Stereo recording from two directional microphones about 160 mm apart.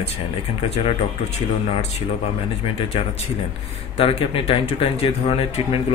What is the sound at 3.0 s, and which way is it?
Speech, 35° left (ahead or behind).